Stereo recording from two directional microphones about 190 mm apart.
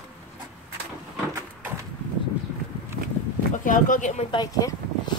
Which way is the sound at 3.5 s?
45° left (ahead or behind).